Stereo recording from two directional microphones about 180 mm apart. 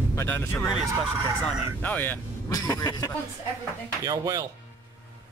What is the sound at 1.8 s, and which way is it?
Speech, 10° left (ahead or behind).